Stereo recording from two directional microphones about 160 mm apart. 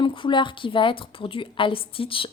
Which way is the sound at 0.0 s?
30° left (ahead or behind).